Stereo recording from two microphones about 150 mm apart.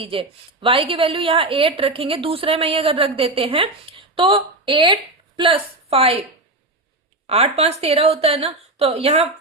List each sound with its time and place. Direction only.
0.0 s a woman's voice: 35° right (ahead or behind)
7.3 s a woman's voice: 45° right (ahead or behind)